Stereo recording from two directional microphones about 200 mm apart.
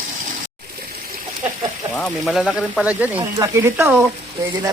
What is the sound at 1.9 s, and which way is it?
Speech, centre (ahead or behind).